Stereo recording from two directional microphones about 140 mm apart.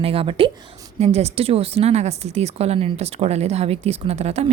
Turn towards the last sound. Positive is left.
turn(degrees=-50)  # may be behind; listen again after turning